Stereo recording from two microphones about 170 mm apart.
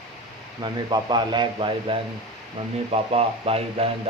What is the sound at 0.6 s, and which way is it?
A man's voice, 25° right (ahead or behind).